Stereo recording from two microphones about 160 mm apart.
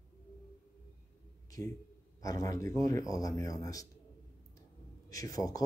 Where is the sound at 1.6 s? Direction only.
20° left (ahead or behind).